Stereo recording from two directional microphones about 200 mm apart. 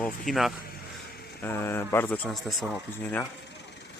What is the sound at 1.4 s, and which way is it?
Speech, 10° left (ahead or behind).